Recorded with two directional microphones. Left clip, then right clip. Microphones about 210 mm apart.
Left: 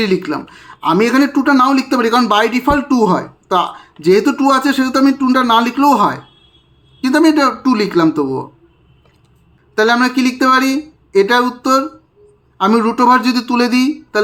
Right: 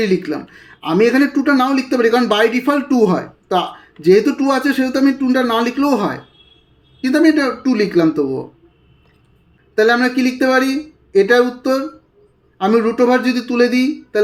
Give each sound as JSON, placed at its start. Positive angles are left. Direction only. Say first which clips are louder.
{"t": 0.0, "sound": "speech", "louder": "left 1 dB", "side_deg": 20}
{"t": 9.7, "sound": "speech", "louder": "left 1 dB", "side_deg": 20}